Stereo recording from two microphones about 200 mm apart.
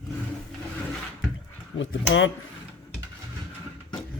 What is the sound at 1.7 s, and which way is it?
Speech, 70° left (ahead or behind).